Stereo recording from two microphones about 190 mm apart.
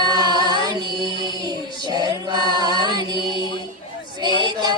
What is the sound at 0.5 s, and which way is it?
Female singing, 20° right (ahead or behind).